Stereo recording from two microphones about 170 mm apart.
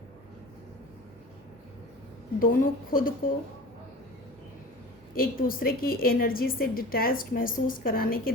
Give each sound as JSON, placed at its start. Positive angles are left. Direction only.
{"t": 2.4, "sound": "a woman's voice", "side_deg": 55}
{"t": 5.1, "sound": "a woman's voice", "side_deg": 55}